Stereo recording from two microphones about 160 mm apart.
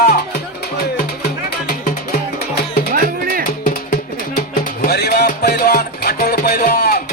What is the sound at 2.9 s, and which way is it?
Music, 60° right (ahead or behind).